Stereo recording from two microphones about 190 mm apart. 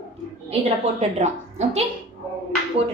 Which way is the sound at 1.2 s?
35° right (ahead or behind).